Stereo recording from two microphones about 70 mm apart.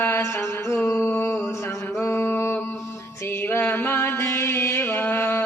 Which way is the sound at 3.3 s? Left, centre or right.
Left.